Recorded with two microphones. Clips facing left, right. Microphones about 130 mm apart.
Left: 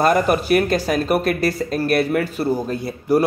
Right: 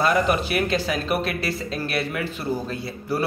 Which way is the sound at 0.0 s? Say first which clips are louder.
Left 4 dB; 45° left (ahead or behind).